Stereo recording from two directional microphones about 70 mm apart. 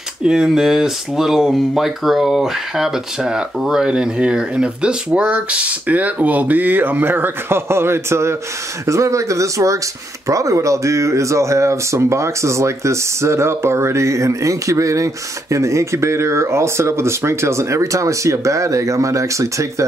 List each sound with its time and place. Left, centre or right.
0.2 s speech: centre; by 19.7 s right